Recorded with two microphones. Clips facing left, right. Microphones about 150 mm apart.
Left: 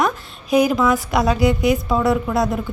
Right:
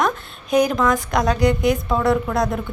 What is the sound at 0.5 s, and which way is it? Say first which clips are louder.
A woman's voice: left 1 dB; 5° left (ahead or behind).